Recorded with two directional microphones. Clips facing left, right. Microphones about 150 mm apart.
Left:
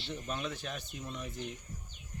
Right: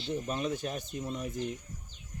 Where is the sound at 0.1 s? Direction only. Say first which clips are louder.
Right 6 dB; 45° right (ahead or behind).